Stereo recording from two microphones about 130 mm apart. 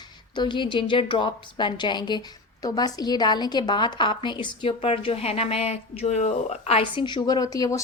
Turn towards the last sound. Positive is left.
turn(degrees=25)  # may be behind; listen again after turning